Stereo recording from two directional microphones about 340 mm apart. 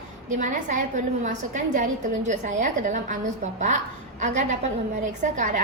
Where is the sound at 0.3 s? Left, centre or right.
Right.